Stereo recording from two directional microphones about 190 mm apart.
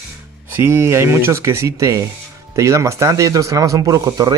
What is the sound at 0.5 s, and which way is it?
Speech, 10° right (ahead or behind).